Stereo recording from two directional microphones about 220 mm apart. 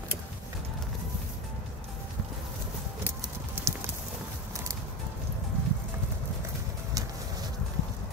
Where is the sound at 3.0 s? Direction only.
10° right (ahead or behind).